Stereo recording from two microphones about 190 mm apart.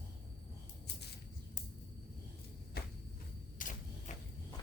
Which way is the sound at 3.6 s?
45° left (ahead or behind).